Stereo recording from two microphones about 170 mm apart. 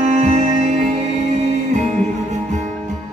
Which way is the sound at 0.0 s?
45° right (ahead or behind).